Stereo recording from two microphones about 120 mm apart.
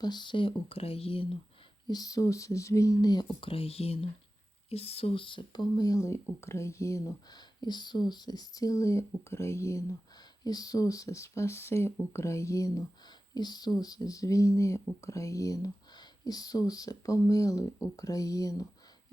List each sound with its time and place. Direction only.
0.0 s speech: 40° left (ahead or behind)
1.9 s speech: 30° left (ahead or behind)